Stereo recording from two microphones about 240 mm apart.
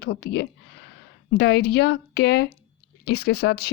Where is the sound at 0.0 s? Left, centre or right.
Left.